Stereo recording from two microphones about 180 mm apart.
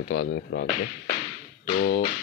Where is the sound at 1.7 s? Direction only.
65° left (ahead or behind).